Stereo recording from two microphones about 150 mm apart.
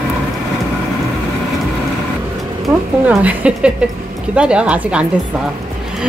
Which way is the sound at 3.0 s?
10° right (ahead or behind).